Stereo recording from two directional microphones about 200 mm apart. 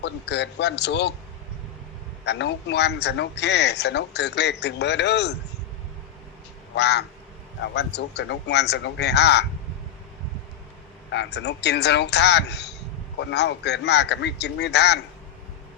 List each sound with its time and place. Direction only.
0.0 s a man's voice: 60° left (ahead or behind)
2.2 s a man's voice: 60° left (ahead or behind)
6.7 s a man's voice: 60° left (ahead or behind)
11.1 s a man's voice: 60° left (ahead or behind)